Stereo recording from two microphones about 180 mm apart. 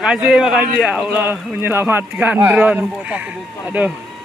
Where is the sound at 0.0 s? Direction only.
5° right (ahead or behind).